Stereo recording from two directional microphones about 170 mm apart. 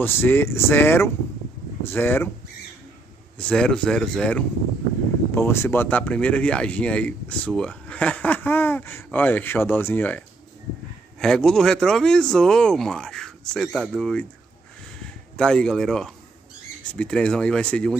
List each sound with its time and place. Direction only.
0.0 s speech: 15° left (ahead or behind)
3.3 s speech: 5° left (ahead or behind)
15.3 s speech: 5° left (ahead or behind)